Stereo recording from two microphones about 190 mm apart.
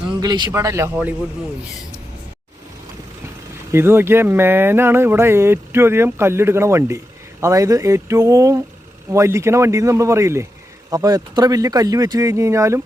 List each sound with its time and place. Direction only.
0.2 s speech: 20° right (ahead or behind)
3.7 s speech: 15° right (ahead or behind)